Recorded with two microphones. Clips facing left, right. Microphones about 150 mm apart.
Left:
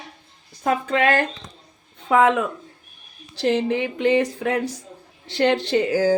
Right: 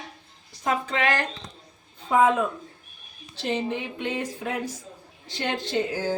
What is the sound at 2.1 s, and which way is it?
A woman's voice, 80° left.